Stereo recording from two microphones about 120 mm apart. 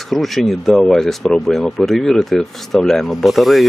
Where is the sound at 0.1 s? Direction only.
Centre (ahead or behind).